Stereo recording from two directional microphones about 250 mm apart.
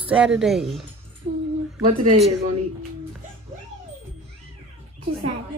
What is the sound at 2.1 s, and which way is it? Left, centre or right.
Speech, right.